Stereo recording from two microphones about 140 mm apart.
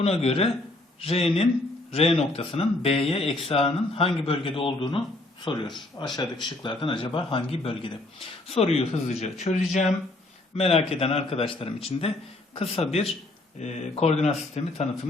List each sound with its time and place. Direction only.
0.0 s speech: 45° left (ahead or behind)